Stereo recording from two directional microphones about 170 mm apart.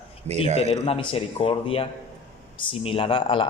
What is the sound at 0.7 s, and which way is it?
Speech, 35° left (ahead or behind).